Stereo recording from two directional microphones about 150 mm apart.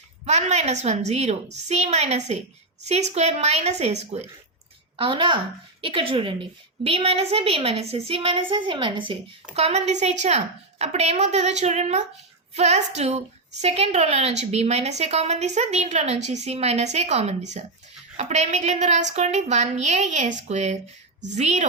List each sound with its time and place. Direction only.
0.3 s a woman's voice: 45° right (ahead or behind)
4.9 s a woman's voice: 35° right (ahead or behind)
9.6 s a woman's voice: 45° right (ahead or behind)